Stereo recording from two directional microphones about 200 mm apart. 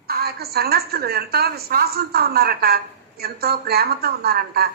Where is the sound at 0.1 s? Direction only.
50° right (ahead or behind).